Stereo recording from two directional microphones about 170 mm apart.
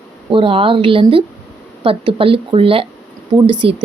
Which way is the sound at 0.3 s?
30° right (ahead or behind).